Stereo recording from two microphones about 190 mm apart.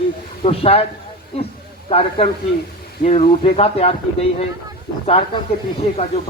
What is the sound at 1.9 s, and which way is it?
Speech, 30° left (ahead or behind).